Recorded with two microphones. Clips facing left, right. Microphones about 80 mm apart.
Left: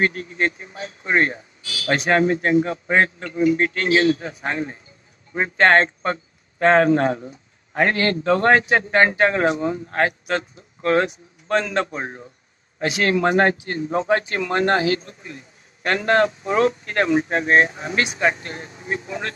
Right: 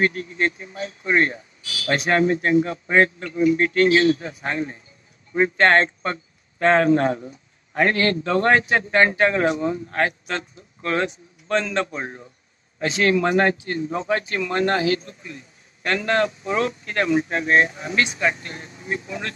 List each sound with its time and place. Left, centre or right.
0.0 s a man's voice: left
18.0 s a man's voice: left